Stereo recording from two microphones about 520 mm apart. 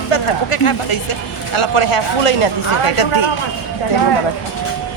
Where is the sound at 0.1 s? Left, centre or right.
Left.